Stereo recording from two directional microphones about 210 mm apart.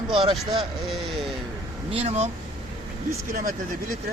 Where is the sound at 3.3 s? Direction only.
40° right (ahead or behind).